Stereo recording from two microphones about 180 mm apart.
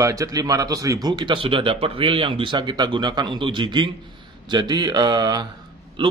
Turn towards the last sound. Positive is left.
turn(degrees=-30)  # may be behind; listen again after turning